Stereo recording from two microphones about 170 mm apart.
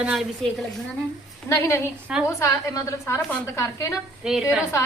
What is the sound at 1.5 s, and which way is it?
Speech, 15° left (ahead or behind).